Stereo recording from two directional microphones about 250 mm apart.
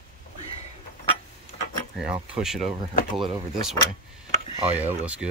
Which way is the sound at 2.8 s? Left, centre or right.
Right.